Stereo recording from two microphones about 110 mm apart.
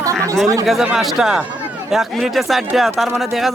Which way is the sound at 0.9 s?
5° right (ahead or behind).